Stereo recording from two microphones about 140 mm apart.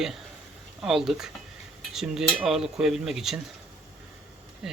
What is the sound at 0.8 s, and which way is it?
Dishes, 5° right (ahead or behind).